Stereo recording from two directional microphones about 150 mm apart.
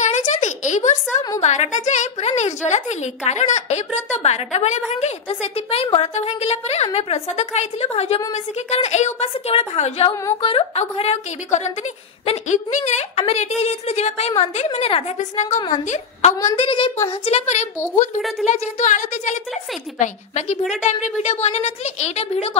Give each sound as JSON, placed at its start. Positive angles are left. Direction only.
{"t": 0.0, "sound": "a sound", "side_deg": 55}
{"t": 1.4, "sound": "a woman's voice", "side_deg": 50}
{"t": 16.6, "sound": "a woman's voice", "side_deg": 35}
{"t": 17.1, "sound": "a woman's voice", "side_deg": 45}